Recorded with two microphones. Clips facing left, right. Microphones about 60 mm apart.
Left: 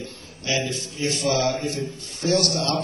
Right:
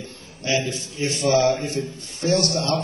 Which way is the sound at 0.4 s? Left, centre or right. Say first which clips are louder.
Right 2 dB; right.